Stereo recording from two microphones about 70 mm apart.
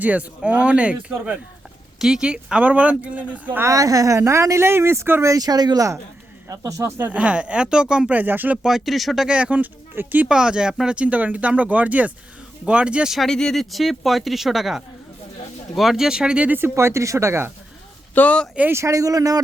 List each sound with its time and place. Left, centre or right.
0.0 s speech: centre
3.7 s a woman's voice: right
4.2 s speech: right
5.4 s speech: right
6.5 s a woman's voice: right
7.0 s speech: centre
8.2 s speech: right
8.6 s speech: centre
9.3 s speech: centre
10.2 s speech: centre
13.1 s speech: centre
16.6 s speech: right
18.1 s speech: left
18.7 s speech: right